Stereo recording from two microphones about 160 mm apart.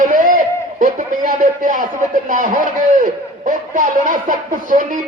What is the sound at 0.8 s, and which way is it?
A man's voice, 50° right (ahead or behind).